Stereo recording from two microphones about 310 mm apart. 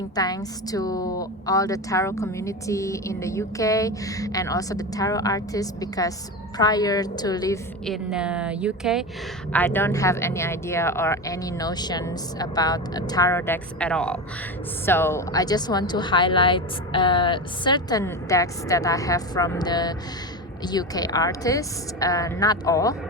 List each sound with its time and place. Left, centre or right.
0.2 s a woman's voice: centre